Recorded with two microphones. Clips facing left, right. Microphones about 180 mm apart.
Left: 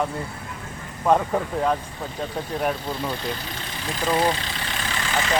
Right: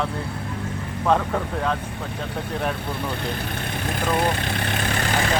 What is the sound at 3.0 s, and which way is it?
Speech, 60° right (ahead or behind).